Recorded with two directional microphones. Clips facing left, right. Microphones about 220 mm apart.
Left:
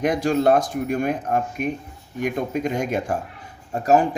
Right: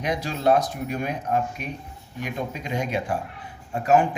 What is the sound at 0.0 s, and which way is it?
Speech, 50° left (ahead or behind).